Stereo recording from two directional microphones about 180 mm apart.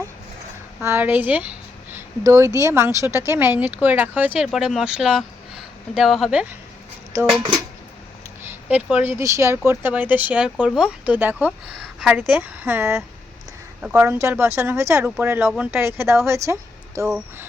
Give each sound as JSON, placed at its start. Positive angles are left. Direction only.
{"t": 0.8, "sound": "speech", "side_deg": -10}
{"t": 7.1, "sound": "speech", "side_deg": -20}
{"t": 8.4, "sound": "speech", "side_deg": -10}